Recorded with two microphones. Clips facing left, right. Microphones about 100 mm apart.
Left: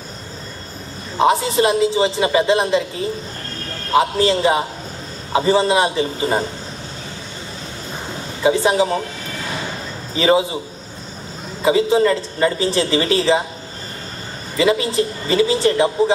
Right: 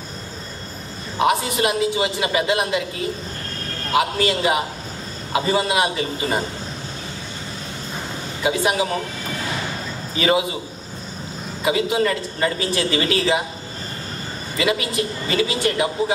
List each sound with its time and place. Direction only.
1.1 s a man's voice: 25° left (ahead or behind)
8.4 s a man's voice: 30° left (ahead or behind)
10.1 s a man's voice: 30° left (ahead or behind)
11.6 s a man's voice: 30° left (ahead or behind)
14.6 s a man's voice: 30° left (ahead or behind)